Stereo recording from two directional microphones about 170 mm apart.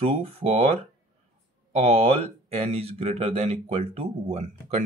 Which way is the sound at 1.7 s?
40° right (ahead or behind).